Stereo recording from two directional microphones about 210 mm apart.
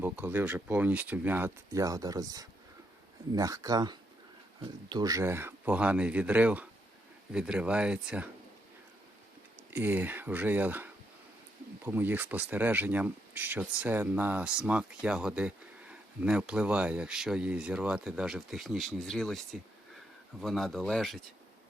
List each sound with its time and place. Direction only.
0.0 s speech: 10° right (ahead or behind)
9.6 s speech: 10° right (ahead or behind)
20.4 s speech: centre (ahead or behind)